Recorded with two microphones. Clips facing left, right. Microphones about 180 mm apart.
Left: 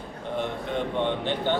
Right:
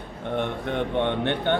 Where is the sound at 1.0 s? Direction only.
60° right (ahead or behind).